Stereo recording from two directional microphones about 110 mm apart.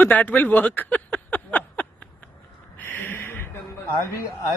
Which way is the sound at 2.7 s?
15° left (ahead or behind).